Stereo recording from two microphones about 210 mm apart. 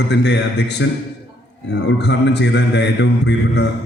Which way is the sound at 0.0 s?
55° left (ahead or behind).